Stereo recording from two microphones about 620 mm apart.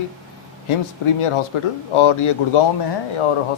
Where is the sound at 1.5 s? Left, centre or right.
Left.